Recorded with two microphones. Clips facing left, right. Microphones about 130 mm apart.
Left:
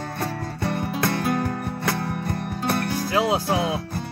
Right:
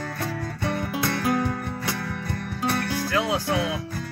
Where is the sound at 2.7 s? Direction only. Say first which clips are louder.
Left 3 dB; 30° left (ahead or behind).